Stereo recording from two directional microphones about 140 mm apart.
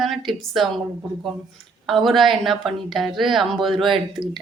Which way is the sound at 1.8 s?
Centre (ahead or behind).